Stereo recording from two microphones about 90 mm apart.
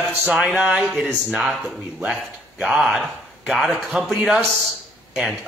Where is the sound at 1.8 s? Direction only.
20° right (ahead or behind).